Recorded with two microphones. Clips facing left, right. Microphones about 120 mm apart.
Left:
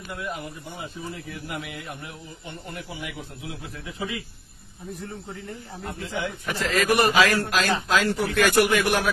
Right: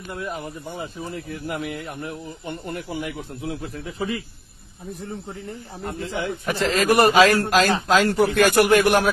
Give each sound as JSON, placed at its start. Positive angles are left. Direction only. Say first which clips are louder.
{"t": 0.1, "sound": "speech", "louder": "right 3 dB", "side_deg": -35}
{"t": 5.9, "sound": "speech", "louder": "right 3 dB", "side_deg": -45}
{"t": 6.4, "sound": "a man's voice", "louder": "right 4 dB", "side_deg": -30}